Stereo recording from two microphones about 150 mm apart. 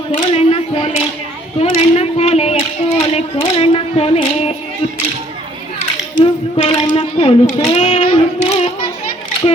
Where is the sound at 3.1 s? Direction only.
40° left (ahead or behind).